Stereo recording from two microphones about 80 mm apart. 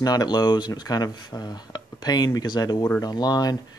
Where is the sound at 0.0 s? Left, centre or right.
Left.